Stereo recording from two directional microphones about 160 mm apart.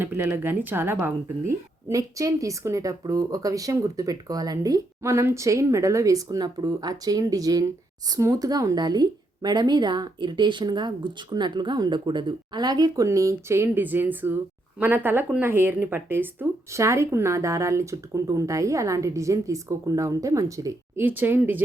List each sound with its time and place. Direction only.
0.0 s speech: 15° right (ahead or behind)